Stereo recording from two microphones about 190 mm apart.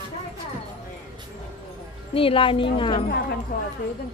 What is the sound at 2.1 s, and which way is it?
Speech, 30° left (ahead or behind).